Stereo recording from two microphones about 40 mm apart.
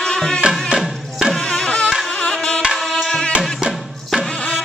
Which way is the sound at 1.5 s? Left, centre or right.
Left.